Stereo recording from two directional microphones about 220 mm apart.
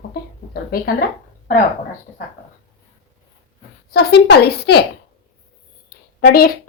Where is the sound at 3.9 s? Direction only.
50° left (ahead or behind).